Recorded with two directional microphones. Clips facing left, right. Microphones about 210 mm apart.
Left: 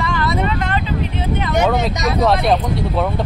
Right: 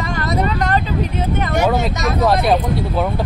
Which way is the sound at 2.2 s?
5° right (ahead or behind).